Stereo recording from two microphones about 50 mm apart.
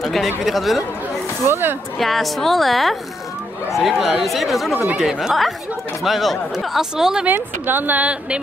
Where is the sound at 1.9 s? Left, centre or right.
Centre.